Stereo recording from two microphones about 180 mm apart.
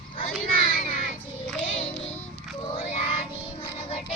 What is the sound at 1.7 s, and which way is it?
Music, 35° left (ahead or behind).